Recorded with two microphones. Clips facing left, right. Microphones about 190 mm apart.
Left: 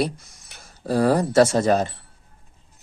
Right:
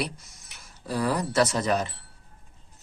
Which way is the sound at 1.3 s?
45° left (ahead or behind).